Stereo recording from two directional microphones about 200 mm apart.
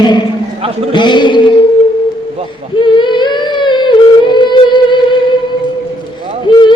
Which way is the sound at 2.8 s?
25° left (ahead or behind).